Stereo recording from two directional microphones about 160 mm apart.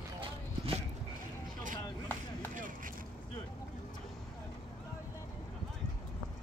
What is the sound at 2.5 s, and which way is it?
Vehicle, 55° right (ahead or behind).